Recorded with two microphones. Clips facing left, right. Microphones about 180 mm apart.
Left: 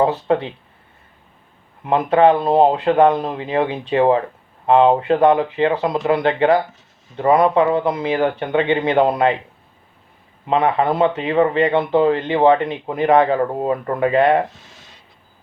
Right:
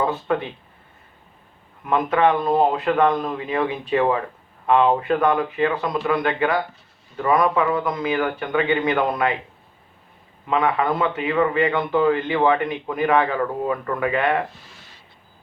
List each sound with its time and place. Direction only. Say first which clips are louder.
0.0 s speech: left 5 dB; 30° left (ahead or behind)
1.8 s speech: left 5 dB; 30° left (ahead or behind)
10.4 s speech: left 4 dB; 30° left (ahead or behind)